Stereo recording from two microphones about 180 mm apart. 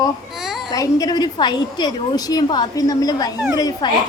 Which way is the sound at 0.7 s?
20° left (ahead or behind).